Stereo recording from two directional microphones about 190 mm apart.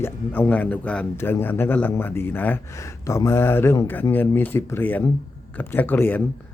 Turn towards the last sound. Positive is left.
turn(degrees=10)  # may be behind; listen again after turning